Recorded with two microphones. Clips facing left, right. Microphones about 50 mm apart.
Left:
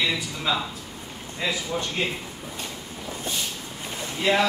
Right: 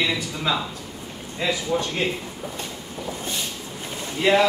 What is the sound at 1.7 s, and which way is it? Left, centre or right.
Speech, centre.